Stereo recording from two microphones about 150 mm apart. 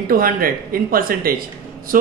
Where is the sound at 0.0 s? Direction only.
70° right (ahead or behind).